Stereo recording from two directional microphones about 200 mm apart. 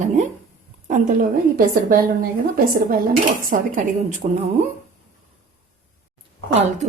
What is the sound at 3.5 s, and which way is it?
Speech, 45° right (ahead or behind).